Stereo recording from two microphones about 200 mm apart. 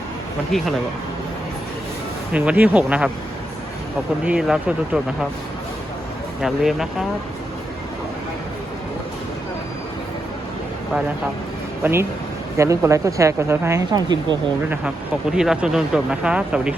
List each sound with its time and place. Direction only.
0.5 s speech: centre (ahead or behind)
2.3 s speech: 5° right (ahead or behind)
4.3 s speech: 5° right (ahead or behind)
6.4 s speech: centre (ahead or behind)
11.8 s speech: 10° right (ahead or behind)
14.7 s speech: 5° right (ahead or behind)